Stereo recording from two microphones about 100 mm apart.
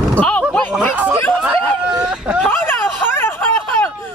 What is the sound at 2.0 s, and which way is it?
Vehicle, 10° right (ahead or behind).